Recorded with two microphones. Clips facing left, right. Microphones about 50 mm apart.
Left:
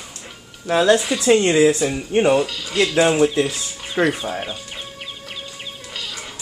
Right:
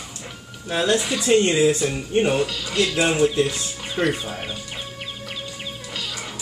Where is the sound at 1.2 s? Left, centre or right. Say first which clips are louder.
Left 2 dB; left.